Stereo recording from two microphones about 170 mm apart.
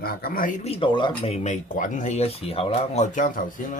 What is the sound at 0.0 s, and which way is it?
Speech, 60° left (ahead or behind).